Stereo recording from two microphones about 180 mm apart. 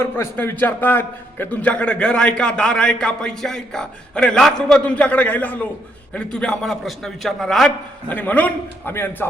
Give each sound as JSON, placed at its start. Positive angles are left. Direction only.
{"t": 0.0, "sound": "a man's voice", "side_deg": 15}